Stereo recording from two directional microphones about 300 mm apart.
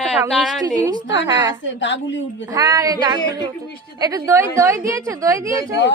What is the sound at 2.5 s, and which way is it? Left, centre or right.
Speech, centre.